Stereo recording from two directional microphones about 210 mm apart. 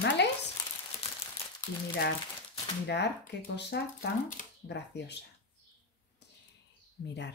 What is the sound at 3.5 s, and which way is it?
Speech, 55° left (ahead or behind).